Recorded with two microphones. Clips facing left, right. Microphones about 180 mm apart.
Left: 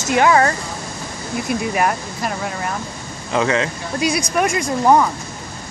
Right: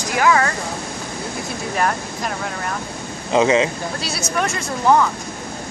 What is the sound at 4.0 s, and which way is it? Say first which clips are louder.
Speech: left 7 dB; 15° left (ahead or behind).